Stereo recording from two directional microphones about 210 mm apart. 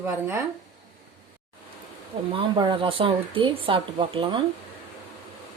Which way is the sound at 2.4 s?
25° right (ahead or behind).